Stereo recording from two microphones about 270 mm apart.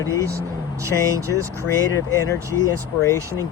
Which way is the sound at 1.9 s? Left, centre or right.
Centre.